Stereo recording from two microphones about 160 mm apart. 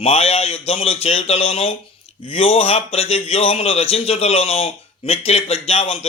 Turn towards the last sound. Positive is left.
turn(degrees=35)  # may be behind; listen again after turning